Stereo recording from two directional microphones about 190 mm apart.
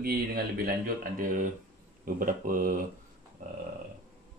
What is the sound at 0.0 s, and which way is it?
Speech, 50° right (ahead or behind).